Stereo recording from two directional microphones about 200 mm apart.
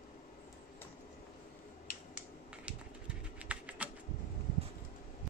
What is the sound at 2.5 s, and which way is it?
Typing, 5° right (ahead or behind).